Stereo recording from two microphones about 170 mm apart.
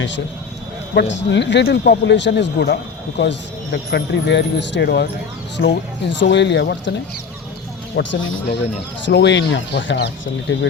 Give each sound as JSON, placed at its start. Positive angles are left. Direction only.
{"t": 0.9, "sound": "speech", "side_deg": 90}
{"t": 8.0, "sound": "speech", "side_deg": 90}